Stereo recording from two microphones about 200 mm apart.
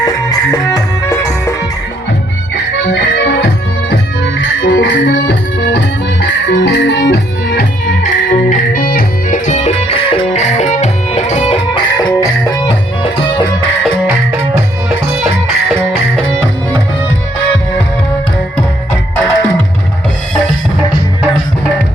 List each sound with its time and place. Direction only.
0.0 s music: 20° left (ahead or behind)
2.9 s music: 55° left (ahead or behind)
4.4 s music: 70° left (ahead or behind); by 11.6 s 30° left (ahead or behind)
11.9 s music: 20° left (ahead or behind)
15.9 s music: 5° left (ahead or behind)